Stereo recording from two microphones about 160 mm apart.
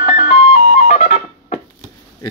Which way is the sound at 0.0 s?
40° left (ahead or behind).